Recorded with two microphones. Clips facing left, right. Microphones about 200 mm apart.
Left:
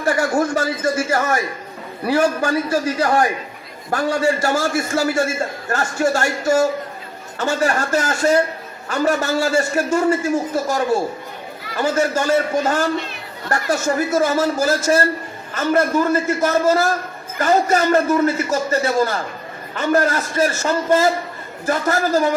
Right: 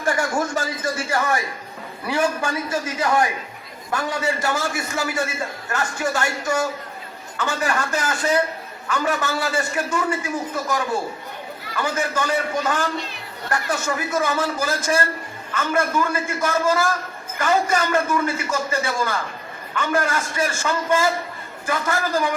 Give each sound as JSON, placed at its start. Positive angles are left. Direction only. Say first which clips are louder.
{"t": 0.0, "sound": "a man's voice", "louder": "left 4 dB", "side_deg": 40}
{"t": 4.4, "sound": "a man's voice", "louder": "left 5 dB", "side_deg": 40}
{"t": 21.7, "sound": "a woman's voice", "louder": "left 5 dB", "side_deg": 45}